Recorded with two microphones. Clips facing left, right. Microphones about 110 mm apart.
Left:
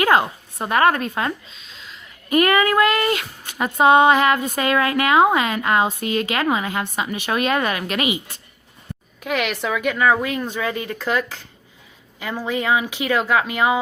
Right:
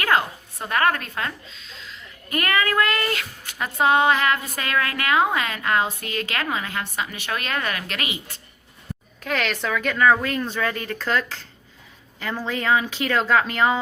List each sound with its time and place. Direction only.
0.0 s a woman's voice: 20° left (ahead or behind)